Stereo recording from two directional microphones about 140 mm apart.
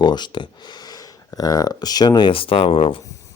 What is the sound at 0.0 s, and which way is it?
Speech, 30° left (ahead or behind).